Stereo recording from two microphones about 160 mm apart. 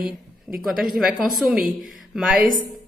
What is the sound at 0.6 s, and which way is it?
Speech, centre (ahead or behind).